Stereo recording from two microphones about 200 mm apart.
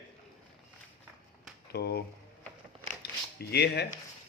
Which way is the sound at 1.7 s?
55° left (ahead or behind).